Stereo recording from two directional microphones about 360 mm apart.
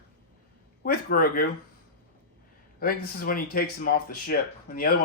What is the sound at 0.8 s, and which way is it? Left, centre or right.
Speech, left.